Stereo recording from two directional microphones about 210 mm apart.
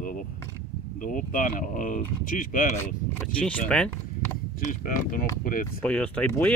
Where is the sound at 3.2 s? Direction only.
5° left (ahead or behind).